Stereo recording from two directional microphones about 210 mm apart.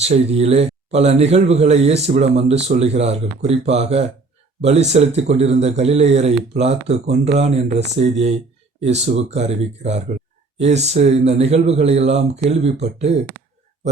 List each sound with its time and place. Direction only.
0.0 s a man's voice: 30° right (ahead or behind)